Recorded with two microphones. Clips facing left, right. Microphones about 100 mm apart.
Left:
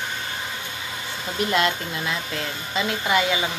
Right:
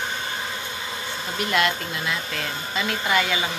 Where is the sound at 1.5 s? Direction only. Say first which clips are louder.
Even; 25° left (ahead or behind).